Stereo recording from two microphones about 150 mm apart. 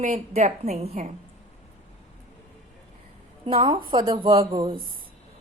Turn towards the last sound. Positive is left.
turn(degrees=-40)  # may be behind; listen again after turning